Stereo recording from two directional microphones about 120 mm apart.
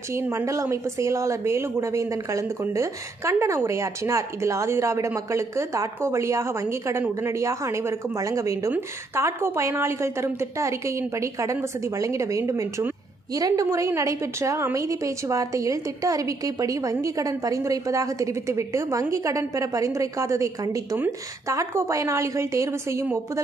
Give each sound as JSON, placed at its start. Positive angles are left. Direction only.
{"t": 0.1, "sound": "a woman's voice", "side_deg": -25}